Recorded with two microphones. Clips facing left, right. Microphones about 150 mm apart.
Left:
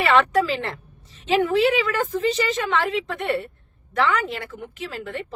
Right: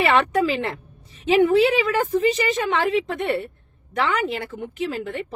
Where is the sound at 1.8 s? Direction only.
15° right (ahead or behind).